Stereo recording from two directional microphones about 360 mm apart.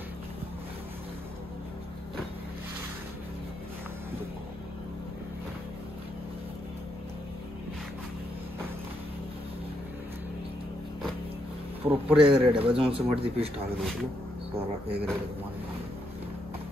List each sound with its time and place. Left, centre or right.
11.8 s speech: centre
14.6 s speech: centre